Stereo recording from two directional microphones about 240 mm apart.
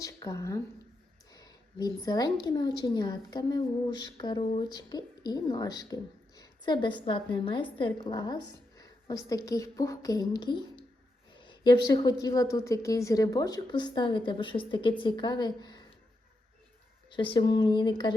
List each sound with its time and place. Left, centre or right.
0.0 s a woman's voice: centre
17.1 s a woman's voice: left